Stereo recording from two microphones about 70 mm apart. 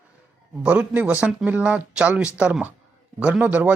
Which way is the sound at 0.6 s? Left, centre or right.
Centre.